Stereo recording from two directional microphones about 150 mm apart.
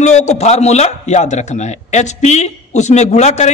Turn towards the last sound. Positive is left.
turn(degrees=50)  # may be behind; listen again after turning